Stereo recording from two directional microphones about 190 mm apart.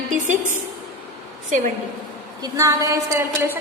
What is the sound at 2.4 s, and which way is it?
A woman's voice, 15° right (ahead or behind).